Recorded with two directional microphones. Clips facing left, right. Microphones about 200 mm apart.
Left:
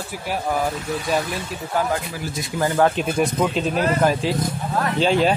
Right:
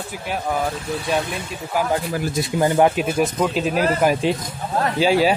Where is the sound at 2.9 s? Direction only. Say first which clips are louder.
Right 1 dB; 5° right (ahead or behind).